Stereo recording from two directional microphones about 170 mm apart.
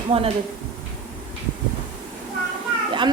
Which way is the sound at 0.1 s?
35° right (ahead or behind).